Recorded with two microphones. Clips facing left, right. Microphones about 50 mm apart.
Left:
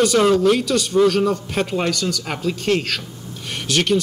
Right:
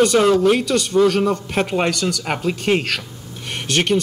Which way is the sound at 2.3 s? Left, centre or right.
Right.